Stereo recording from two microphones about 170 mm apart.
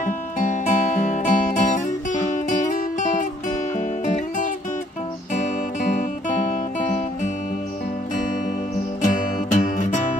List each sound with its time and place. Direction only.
0.0 s music: 50° left (ahead or behind)
9.0 s music: 50° left (ahead or behind)